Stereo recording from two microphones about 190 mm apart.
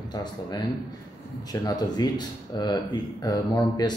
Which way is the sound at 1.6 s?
20° left (ahead or behind).